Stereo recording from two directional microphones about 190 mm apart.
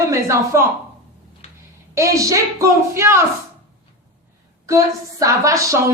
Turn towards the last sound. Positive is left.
turn(degrees=-15)  # may be behind; listen again after turning